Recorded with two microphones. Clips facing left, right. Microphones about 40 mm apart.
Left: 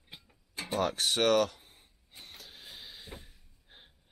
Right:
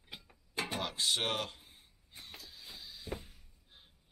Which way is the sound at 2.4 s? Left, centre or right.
Left.